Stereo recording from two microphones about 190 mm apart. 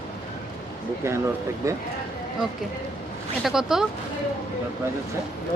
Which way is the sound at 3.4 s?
Centre (ahead or behind).